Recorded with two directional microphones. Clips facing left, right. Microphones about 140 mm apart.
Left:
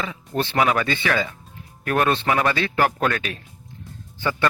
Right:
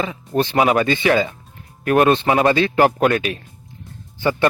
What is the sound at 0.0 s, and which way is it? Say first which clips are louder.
A man's voice: right 5 dB; 20° right (ahead or behind).